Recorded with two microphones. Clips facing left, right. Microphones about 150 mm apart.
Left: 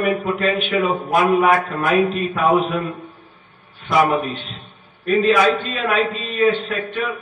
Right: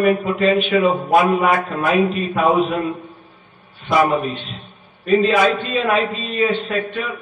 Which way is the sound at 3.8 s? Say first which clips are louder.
Right 1 dB; centre (ahead or behind).